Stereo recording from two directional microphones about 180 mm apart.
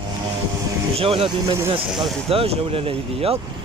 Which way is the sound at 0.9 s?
30° right (ahead or behind).